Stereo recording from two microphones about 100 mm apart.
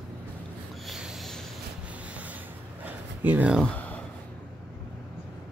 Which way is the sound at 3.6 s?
15° left (ahead or behind).